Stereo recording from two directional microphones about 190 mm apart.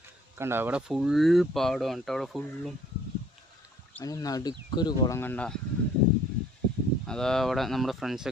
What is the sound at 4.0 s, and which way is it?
Speech, 20° left (ahead or behind).